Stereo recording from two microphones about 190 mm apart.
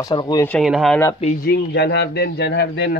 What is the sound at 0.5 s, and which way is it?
Speech, centre (ahead or behind).